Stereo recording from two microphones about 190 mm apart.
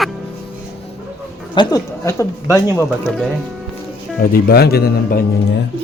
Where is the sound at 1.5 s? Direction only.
15° left (ahead or behind).